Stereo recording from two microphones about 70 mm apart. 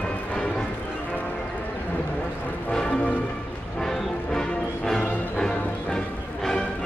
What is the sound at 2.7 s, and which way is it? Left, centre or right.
Music, centre.